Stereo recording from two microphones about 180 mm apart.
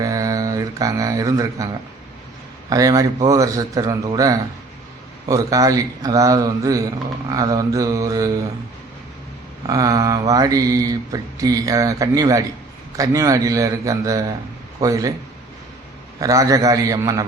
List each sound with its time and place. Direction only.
0.0 s a sound: 20° right (ahead or behind)
2.6 s mantra: 20° right (ahead or behind)
9.6 s mantra: 20° right (ahead or behind)
16.2 s mantra: 20° right (ahead or behind)